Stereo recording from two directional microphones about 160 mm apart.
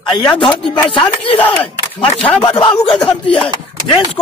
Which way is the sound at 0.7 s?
10° left (ahead or behind).